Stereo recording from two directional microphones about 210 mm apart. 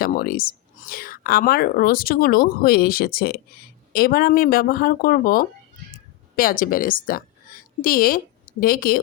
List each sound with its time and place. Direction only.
0.0 s a woman's voice: 45° left (ahead or behind)